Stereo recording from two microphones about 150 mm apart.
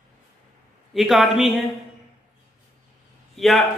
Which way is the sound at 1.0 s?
Centre (ahead or behind).